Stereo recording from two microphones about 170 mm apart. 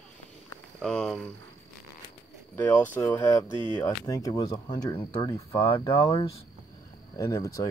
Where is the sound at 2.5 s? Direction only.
10° left (ahead or behind); by 6.0 s 30° left (ahead or behind).